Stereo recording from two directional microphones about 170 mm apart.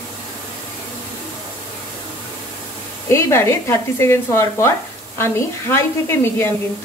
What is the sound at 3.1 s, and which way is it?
Speech, 15° left (ahead or behind).